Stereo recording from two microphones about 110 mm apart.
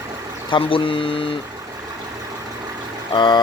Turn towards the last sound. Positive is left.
turn(degrees=45)  # may be behind; listen again after turning